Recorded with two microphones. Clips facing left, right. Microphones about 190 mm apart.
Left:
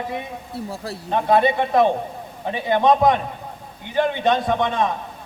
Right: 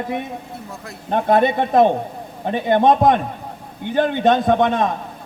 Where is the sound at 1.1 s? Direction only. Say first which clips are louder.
Right 2 dB; 50° right (ahead or behind).